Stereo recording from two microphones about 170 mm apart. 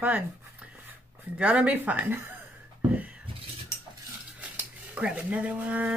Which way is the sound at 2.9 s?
10° right (ahead or behind).